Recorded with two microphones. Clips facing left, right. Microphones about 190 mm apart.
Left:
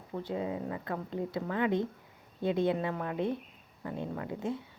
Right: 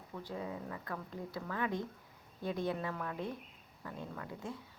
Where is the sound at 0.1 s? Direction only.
35° left (ahead or behind).